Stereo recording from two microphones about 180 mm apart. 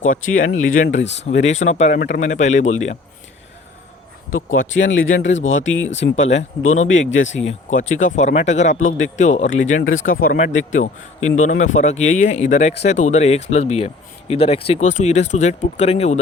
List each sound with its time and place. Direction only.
0.0 s speech: 45° left (ahead or behind)
0.9 s speech: 75° left (ahead or behind)
1.2 s speech: 40° left (ahead or behind)
4.5 s speech: 90° left
7.4 s speech: 45° left (ahead or behind)